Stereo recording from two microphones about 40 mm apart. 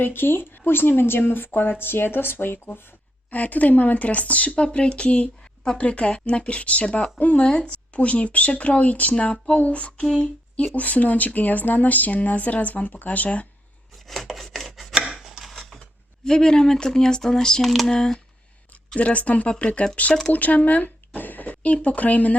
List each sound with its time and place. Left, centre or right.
0.0 s speech: left
3.2 s speech: left
7.3 s speech: left
7.7 s speech: left
10.0 s speech: centre
10.8 s speech: left
14.1 s rub: centre
14.9 s chopping: centre
16.2 s speech: centre
17.6 s speech: centre
18.9 s speech: left
21.2 s speech: left